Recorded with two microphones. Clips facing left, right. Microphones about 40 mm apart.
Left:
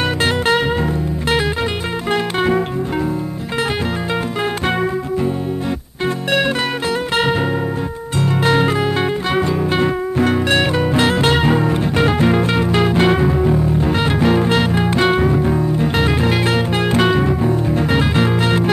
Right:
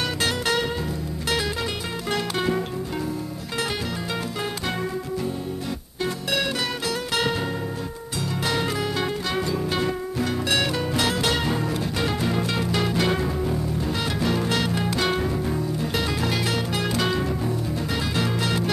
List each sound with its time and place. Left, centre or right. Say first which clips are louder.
0.2 s music: left 7 dB; left
8.2 s music: left 10 dB; left